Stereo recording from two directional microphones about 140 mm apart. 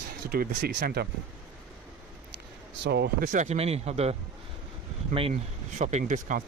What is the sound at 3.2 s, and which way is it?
Speech, 90° right.